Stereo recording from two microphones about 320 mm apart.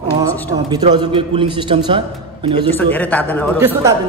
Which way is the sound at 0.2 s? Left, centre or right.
Centre.